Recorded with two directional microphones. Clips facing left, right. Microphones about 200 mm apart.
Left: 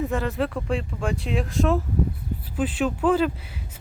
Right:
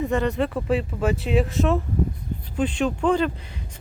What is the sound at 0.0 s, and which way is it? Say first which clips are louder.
Speech: right 2 dB; centre (ahead or behind).